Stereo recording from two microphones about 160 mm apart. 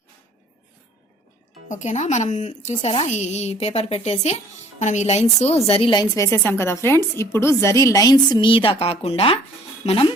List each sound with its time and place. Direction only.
1.6 s a woman's voice: 50° left (ahead or behind)